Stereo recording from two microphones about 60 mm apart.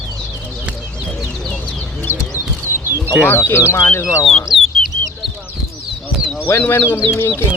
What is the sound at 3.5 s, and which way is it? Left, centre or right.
Speech, left.